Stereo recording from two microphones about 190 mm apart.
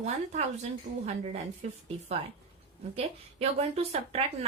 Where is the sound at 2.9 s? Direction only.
30° right (ahead or behind).